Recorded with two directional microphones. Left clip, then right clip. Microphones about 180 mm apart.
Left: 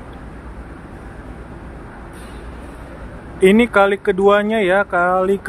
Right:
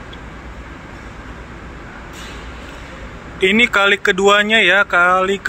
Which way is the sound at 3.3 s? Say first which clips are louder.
Left 1 dB; 25° left (ahead or behind).